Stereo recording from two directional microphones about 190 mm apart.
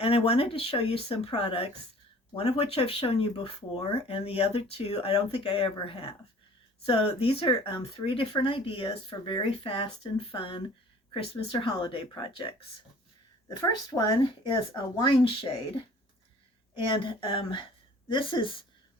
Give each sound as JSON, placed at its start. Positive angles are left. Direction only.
{"t": 0.0, "sound": "speech", "side_deg": 30}
{"t": 16.7, "sound": "speech", "side_deg": 25}